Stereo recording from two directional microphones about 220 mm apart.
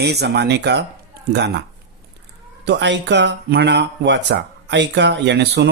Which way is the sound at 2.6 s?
50° right (ahead or behind).